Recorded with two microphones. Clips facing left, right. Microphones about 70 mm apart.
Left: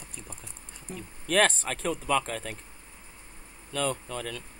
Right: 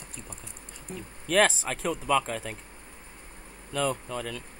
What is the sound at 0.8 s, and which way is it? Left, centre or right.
Speech, centre.